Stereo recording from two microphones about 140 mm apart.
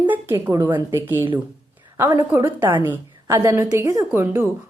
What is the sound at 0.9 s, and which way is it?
A woman's voice, 15° right (ahead or behind).